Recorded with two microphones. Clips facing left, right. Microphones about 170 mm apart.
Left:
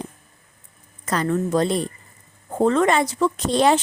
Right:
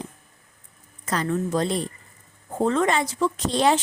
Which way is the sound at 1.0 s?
60° left (ahead or behind).